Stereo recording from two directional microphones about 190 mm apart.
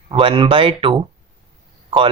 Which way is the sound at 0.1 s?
25° right (ahead or behind).